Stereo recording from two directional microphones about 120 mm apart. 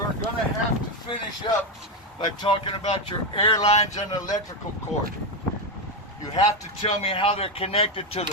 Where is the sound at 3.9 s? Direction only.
30° left (ahead or behind).